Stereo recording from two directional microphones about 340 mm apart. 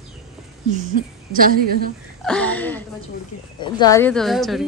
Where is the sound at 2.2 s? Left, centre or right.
Centre.